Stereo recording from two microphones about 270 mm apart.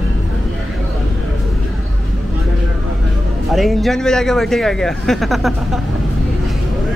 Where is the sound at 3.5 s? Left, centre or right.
Centre.